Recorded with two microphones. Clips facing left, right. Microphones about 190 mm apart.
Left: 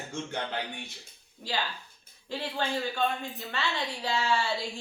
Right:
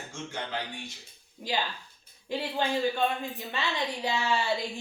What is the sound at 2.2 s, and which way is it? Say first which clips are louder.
A woman's voice: right 2 dB; 15° right (ahead or behind).